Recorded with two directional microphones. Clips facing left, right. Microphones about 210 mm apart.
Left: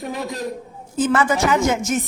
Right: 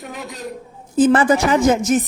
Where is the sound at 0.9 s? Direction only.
30° right (ahead or behind).